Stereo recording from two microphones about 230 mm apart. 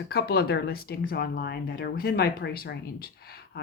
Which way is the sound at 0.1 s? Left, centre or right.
Left.